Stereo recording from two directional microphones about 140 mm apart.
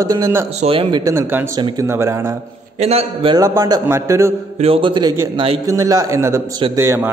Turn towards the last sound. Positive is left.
turn(degrees=-20)  # may be behind; listen again after turning